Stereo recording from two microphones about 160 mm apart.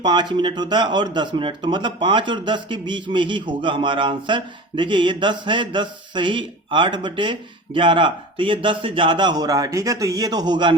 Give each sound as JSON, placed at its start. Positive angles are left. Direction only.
{"t": 0.0, "sound": "speech", "side_deg": -30}